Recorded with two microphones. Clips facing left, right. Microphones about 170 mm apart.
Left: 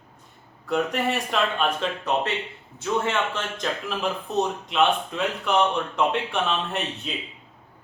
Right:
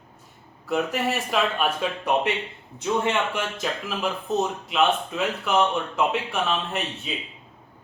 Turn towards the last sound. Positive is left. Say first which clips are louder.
# even
turn(degrees=0)  # may be behind; listen again after turning